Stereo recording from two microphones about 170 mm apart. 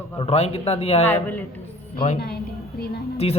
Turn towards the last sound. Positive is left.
turn(degrees=35)  # may be behind; listen again after turning